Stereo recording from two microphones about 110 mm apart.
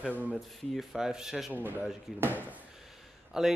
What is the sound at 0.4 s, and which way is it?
Speech, centre (ahead or behind).